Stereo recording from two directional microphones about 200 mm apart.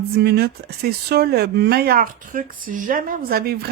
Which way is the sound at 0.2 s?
55° right (ahead or behind).